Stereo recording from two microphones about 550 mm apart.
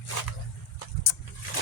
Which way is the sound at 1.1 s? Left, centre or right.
Left.